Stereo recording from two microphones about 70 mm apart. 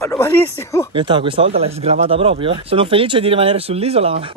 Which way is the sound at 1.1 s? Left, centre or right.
Right.